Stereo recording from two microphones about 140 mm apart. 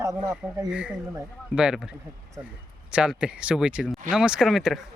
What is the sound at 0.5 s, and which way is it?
Speech, 10° right (ahead or behind).